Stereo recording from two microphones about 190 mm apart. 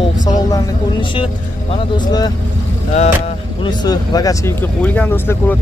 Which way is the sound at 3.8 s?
20° left (ahead or behind).